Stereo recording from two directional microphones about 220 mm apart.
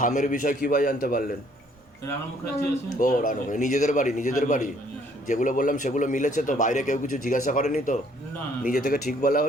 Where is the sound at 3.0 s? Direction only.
35° left (ahead or behind).